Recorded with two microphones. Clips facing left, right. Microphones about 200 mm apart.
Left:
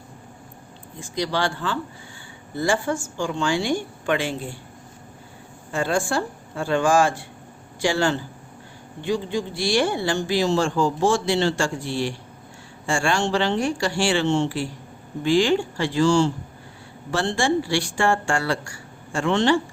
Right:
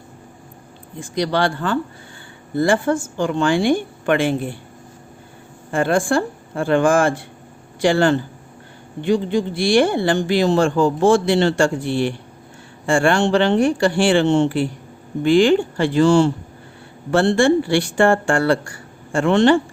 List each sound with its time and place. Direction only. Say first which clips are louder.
0.9 s speech: right 5 dB; 55° right (ahead or behind)
5.7 s speech: right 6 dB; 55° right (ahead or behind)